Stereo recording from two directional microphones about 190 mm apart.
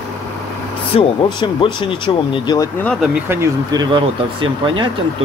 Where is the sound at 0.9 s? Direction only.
25° left (ahead or behind).